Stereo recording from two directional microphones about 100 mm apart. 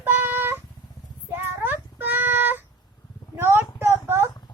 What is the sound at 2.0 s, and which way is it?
Child singing, 20° right (ahead or behind).